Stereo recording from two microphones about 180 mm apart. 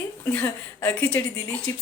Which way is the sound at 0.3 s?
10° left (ahead or behind).